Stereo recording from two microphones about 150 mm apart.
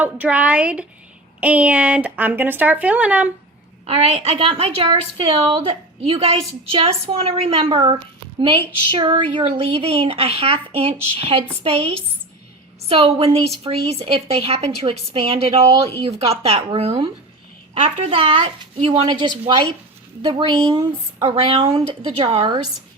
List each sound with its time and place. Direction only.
0.0 s speech: 10° right (ahead or behind)
3.8 s a woman's voice: 40° right (ahead or behind)
9.5 s a woman's voice: 45° right (ahead or behind); by 20.8 s 25° right (ahead or behind)
21.2 s a woman's voice: 40° right (ahead or behind)